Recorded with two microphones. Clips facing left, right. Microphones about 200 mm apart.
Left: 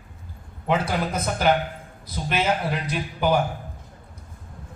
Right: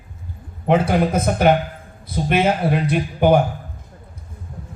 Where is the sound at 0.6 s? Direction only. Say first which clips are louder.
Right 7 dB; 55° right (ahead or behind).